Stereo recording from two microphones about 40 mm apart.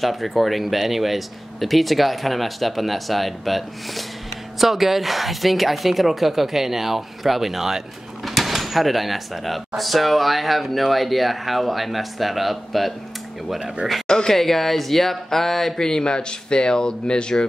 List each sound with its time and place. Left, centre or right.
0.0 s a woman's voice: centre
14.0 s a sound: centre
14.3 s speech: centre